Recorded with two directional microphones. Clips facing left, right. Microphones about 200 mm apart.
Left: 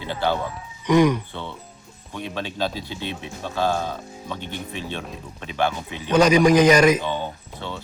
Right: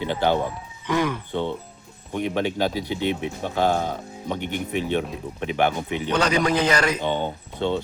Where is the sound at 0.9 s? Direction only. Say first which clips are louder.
Left 7 dB; 15° left (ahead or behind).